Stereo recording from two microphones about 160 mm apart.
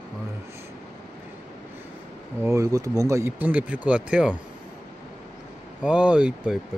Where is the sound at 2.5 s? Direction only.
20° right (ahead or behind).